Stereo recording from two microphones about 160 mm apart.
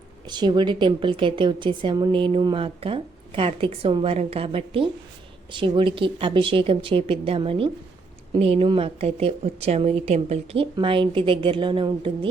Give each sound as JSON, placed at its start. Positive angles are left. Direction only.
{"t": 0.3, "sound": "a woman's voice", "side_deg": -25}